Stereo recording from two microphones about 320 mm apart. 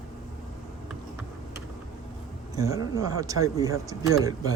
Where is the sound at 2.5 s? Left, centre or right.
Centre.